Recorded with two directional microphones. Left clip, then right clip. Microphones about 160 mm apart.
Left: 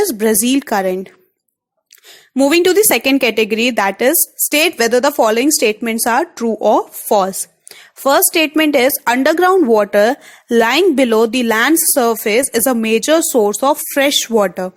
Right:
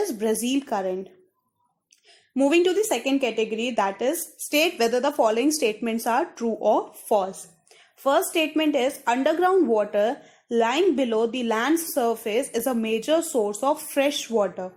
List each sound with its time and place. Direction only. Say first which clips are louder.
0.0 s a woman's voice: left 10 dB; 45° left (ahead or behind)
2.3 s a woman's voice: left 9 dB; 45° left (ahead or behind)